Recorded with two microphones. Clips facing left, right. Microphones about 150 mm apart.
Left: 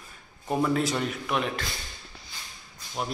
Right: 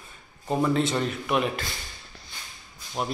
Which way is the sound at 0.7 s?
Centre (ahead or behind).